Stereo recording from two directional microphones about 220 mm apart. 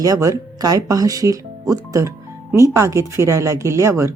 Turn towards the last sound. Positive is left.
turn(degrees=-10)  # may be behind; listen again after turning